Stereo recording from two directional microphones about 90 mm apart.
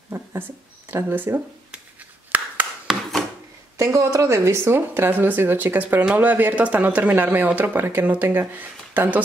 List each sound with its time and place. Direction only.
0.1 s a sound: 25° right (ahead or behind)
2.9 s wood: centre (ahead or behind)
3.7 s speech: 35° right (ahead or behind)